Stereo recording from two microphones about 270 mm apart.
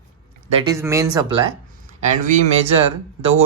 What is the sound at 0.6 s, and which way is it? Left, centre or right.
Speech, centre.